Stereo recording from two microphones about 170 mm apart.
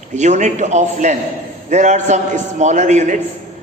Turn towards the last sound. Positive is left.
turn(degrees=-45)  # may be behind; listen again after turning